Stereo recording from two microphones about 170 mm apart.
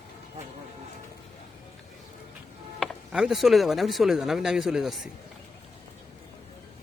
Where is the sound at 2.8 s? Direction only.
Centre (ahead or behind).